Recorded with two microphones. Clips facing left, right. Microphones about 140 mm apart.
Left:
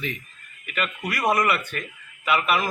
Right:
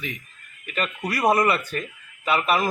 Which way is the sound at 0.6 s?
35° right (ahead or behind).